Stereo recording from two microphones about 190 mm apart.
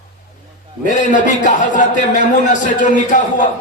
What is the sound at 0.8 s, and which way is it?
A man's voice, 40° left (ahead or behind).